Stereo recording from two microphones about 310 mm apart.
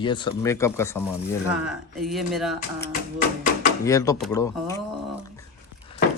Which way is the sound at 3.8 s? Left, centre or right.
Centre.